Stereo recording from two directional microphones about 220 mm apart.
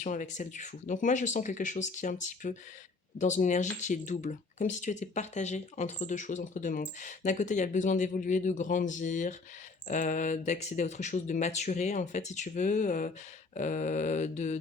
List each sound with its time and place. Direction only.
0.0 s speech: 35° left (ahead or behind)